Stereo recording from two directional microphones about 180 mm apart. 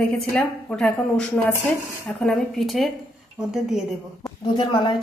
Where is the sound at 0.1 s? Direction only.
5° left (ahead or behind).